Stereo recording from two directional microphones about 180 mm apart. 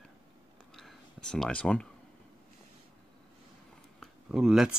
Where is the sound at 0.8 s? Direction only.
5° left (ahead or behind).